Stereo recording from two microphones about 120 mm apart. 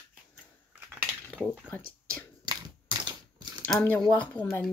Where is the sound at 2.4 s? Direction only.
35° right (ahead or behind).